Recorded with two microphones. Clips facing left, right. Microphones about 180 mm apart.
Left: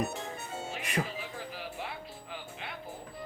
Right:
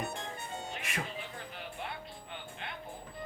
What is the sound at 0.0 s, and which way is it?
Music, 5° left (ahead or behind).